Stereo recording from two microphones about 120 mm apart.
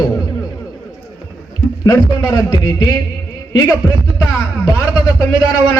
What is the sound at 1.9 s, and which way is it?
Speech, 30° left (ahead or behind).